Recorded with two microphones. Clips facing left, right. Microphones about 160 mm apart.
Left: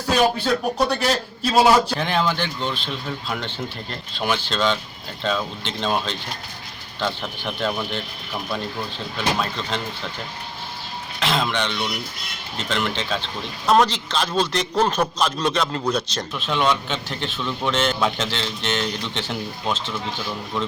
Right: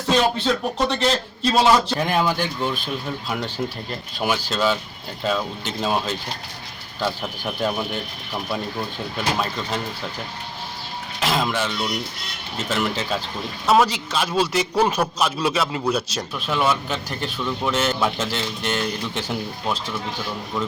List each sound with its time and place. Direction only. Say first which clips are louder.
0.4 s speech: left 1 dB; 5° left (ahead or behind)
2.0 s speech: right 1 dB; 10° right (ahead or behind)
11.2 s speech: even; 5° right (ahead or behind)